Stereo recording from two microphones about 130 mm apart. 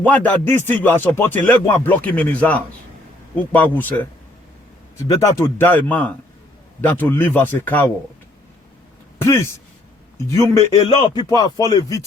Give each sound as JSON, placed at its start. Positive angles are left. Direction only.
{"t": 0.0, "sound": "speech", "side_deg": 10}
{"t": 5.0, "sound": "speech", "side_deg": 20}
{"t": 9.1, "sound": "speech", "side_deg": 20}
{"t": 10.8, "sound": "speech", "side_deg": 35}